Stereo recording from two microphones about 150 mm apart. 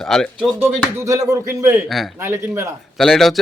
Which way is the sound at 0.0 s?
5° left (ahead or behind).